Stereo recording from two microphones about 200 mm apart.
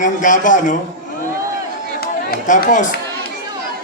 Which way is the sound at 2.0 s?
50° left (ahead or behind).